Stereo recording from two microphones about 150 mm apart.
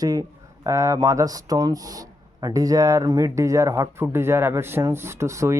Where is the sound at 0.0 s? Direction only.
25° right (ahead or behind).